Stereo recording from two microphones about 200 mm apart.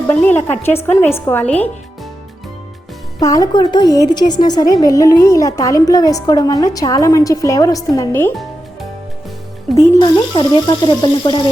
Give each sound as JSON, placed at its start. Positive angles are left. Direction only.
{"t": 0.1, "sound": "a woman's voice", "side_deg": 10}
{"t": 3.2, "sound": "a woman's voice", "side_deg": 15}
{"t": 9.7, "sound": "speech", "side_deg": 20}